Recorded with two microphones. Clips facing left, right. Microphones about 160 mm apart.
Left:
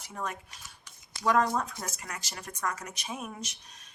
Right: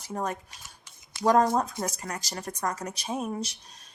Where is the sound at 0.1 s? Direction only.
40° right (ahead or behind).